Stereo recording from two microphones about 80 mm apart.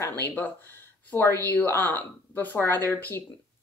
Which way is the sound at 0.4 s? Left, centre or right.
Left.